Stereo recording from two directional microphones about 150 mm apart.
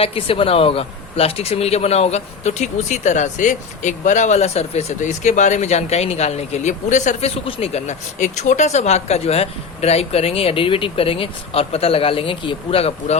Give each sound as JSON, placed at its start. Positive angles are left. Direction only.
{"t": 0.0, "sound": "speech", "side_deg": 40}